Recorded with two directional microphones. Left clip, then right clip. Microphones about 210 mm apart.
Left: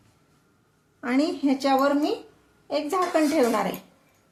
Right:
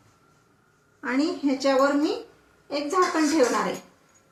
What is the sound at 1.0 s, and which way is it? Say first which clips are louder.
Speech: left 1 dB; 55° left (ahead or behind).